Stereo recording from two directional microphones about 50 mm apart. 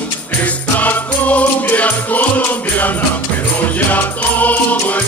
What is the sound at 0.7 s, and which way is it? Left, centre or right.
Music, left.